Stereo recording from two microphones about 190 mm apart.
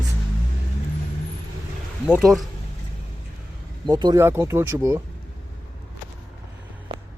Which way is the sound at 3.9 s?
20° right (ahead or behind).